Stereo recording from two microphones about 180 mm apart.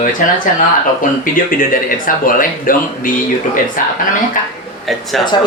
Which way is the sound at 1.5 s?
50° left (ahead or behind).